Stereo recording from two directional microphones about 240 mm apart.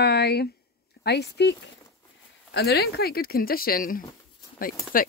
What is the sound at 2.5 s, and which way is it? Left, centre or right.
Speech, left.